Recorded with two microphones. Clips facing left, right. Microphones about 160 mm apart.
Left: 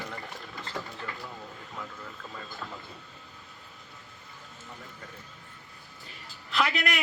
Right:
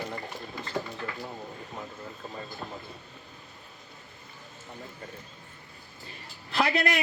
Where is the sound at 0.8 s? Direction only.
25° right (ahead or behind).